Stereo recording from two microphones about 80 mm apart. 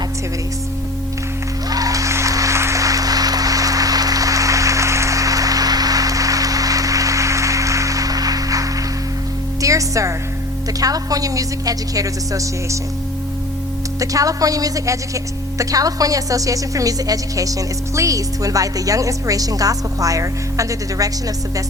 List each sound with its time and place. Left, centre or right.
1.7 s music: right
10.8 s speech: right
14.0 s speech: right